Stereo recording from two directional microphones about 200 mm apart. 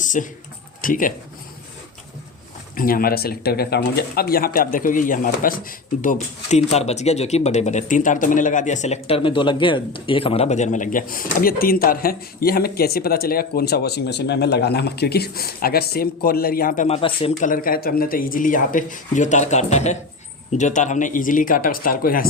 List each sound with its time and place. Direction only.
0.0 s a sound: 40° left (ahead or behind)
0.8 s speech: 45° left (ahead or behind)
2.7 s speech: 45° left (ahead or behind); by 17.5 s 30° left (ahead or behind)
17.5 s a man's voice: 45° left (ahead or behind)